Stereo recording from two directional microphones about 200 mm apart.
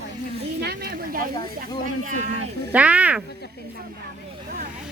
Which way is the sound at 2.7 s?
5° right (ahead or behind).